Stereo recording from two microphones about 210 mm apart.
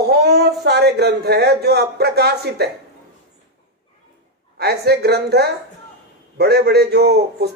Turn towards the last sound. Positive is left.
turn(degrees=-50)  # may be behind; listen again after turning